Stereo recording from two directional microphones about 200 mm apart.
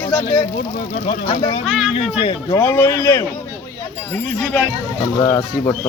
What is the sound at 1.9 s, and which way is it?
Speech, 25° left (ahead or behind).